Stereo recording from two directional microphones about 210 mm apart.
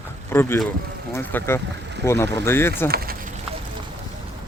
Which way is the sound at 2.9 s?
45° right (ahead or behind).